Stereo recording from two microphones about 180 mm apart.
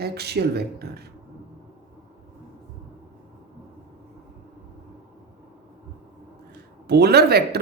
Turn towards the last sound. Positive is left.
turn(degrees=-65)  # may be behind; listen again after turning